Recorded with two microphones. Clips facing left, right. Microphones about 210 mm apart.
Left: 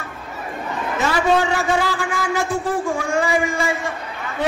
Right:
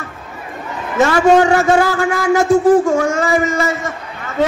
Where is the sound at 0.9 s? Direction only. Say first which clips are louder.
Right 8 dB; 45° right (ahead or behind).